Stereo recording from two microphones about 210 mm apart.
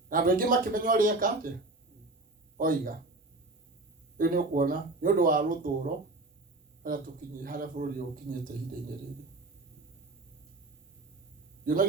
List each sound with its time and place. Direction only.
0.1 s speech: 40° right (ahead or behind)
2.6 s speech: 40° right (ahead or behind)
4.2 s speech: 40° right (ahead or behind)
11.6 s a man's voice: 40° right (ahead or behind)